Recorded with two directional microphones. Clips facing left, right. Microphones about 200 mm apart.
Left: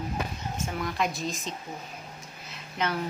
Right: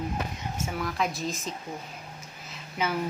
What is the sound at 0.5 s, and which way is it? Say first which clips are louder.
Speech: even; 5° right (ahead or behind).